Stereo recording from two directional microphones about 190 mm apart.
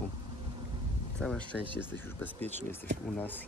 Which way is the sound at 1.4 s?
25° right (ahead or behind).